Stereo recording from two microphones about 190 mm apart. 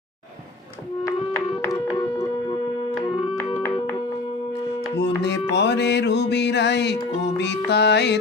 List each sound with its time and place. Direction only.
1.6 s music: 15° left (ahead or behind)
5.0 s music: 65° left (ahead or behind)